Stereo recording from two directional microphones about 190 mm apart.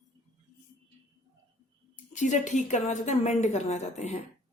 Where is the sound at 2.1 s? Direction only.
40° left (ahead or behind).